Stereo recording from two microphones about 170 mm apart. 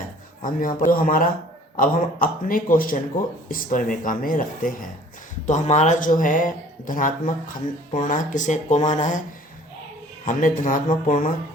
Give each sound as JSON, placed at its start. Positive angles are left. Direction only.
{"t": 0.4, "sound": "a man's voice", "side_deg": 55}
{"t": 10.2, "sound": "speech", "side_deg": 50}